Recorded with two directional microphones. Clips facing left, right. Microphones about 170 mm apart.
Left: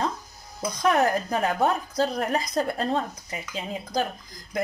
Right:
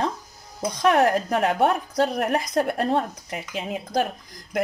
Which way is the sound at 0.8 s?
70° right (ahead or behind).